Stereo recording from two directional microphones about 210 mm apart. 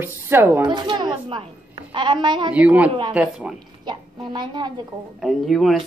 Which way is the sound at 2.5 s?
5° right (ahead or behind).